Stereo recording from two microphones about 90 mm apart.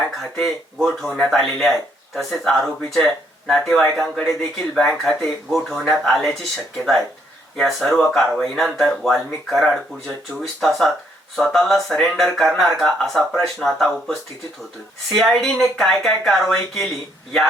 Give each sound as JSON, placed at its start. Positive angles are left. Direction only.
{"t": 0.2, "sound": "speech", "side_deg": 5}